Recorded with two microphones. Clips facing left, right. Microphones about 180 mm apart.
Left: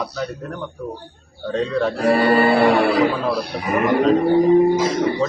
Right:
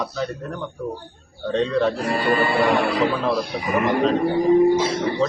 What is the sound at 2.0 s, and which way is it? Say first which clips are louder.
Speech: left 5 dB; 60° left (ahead or behind).